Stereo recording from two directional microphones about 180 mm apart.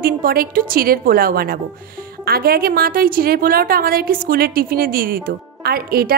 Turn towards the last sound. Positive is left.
turn(degrees=-60)  # may be behind; listen again after turning